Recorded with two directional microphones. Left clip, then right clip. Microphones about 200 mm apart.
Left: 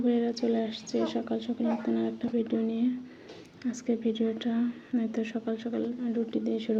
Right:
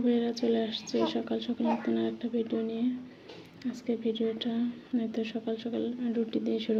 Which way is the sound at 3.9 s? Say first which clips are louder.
Left 1 dB; 10° left (ahead or behind).